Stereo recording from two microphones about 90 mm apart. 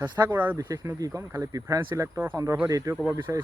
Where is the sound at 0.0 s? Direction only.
45° right (ahead or behind).